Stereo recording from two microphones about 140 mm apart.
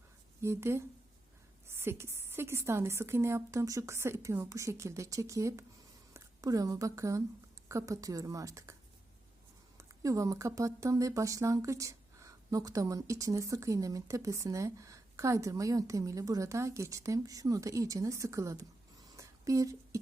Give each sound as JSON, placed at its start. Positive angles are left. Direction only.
{"t": 0.4, "sound": "a woman's voice", "side_deg": -20}
{"t": 9.7, "sound": "speech", "side_deg": -25}
{"t": 19.1, "sound": "a sound", "side_deg": -20}